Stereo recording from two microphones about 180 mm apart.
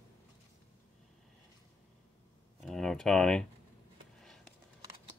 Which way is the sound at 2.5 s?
Centre (ahead or behind).